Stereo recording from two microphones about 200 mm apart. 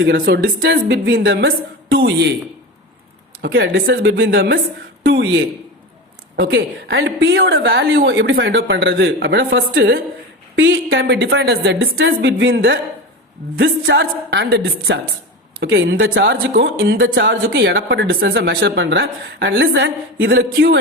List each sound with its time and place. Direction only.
0.0 s speech: 60° right (ahead or behind)
3.4 s speech: 60° right (ahead or behind)
3.8 s speech: 50° right (ahead or behind)
4.2 s speech: 65° right (ahead or behind)
10.5 s speech: 65° right (ahead or behind)
11.0 s speech: 55° right (ahead or behind)
15.6 s speech: 65° right (ahead or behind)